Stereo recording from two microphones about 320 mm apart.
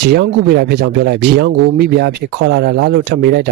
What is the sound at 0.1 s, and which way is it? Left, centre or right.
Speech, right.